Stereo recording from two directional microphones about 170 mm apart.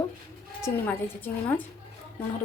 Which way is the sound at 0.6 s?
15° left (ahead or behind).